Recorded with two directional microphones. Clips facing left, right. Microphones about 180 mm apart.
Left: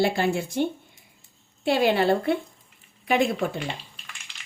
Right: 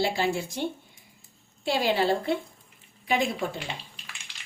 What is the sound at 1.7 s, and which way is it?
Speech, 60° left (ahead or behind).